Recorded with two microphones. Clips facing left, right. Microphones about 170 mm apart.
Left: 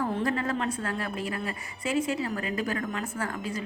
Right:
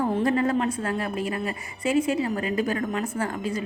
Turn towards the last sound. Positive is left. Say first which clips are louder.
# right 5 dB
turn(degrees=-20)  # may be behind; listen again after turning